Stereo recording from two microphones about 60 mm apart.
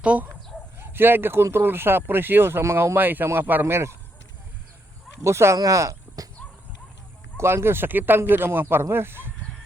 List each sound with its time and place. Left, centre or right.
0.0 s chicken: right
0.8 s speech: right
3.7 s speech: right
5.2 s speech: right
5.5 s speech: right
7.3 s speech: right